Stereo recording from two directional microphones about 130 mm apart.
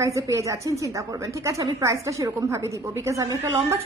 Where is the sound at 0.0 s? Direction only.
25° right (ahead or behind).